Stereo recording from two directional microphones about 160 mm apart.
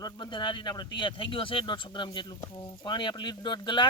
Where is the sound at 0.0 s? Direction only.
25° left (ahead or behind).